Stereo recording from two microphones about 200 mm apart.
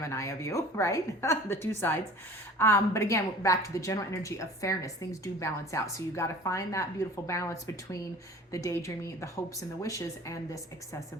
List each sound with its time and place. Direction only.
0.1 s a woman's voice: 15° left (ahead or behind)